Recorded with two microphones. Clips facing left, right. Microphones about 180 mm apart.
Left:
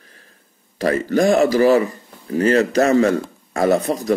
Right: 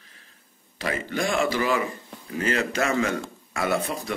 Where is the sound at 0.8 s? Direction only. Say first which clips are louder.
Left 11 dB; 40° left (ahead or behind).